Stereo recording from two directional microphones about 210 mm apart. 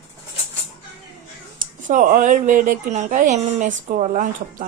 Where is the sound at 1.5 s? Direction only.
40° right (ahead or behind).